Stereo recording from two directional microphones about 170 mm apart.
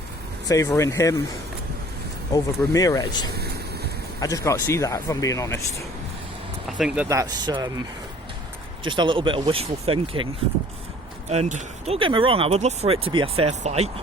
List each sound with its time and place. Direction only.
0.4 s speech: 20° left (ahead or behind)
2.3 s speech: 20° left (ahead or behind)
6.7 s speech: 5° right (ahead or behind); by 7.7 s 25° right (ahead or behind)
8.8 s speech: 30° right (ahead or behind)
11.3 s speech: 40° right (ahead or behind)
11.9 s speech: 30° right (ahead or behind)